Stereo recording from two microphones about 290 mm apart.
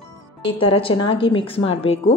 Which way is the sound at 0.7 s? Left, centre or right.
Centre.